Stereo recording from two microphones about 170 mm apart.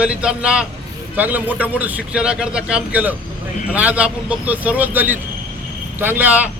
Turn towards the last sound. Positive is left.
turn(degrees=-10)  # may be behind; listen again after turning